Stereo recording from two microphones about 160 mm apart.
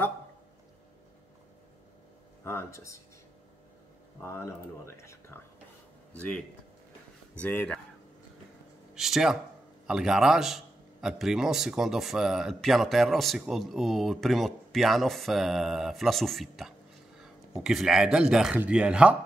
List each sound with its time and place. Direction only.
2.4 s a sound: 15° left (ahead or behind)
4.2 s speech: 15° left (ahead or behind)
7.3 s speech: 10° left (ahead or behind)
8.9 s a man's voice: centre (ahead or behind)